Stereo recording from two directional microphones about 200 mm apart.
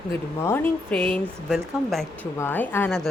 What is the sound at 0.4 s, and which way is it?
Speech, 10° left (ahead or behind).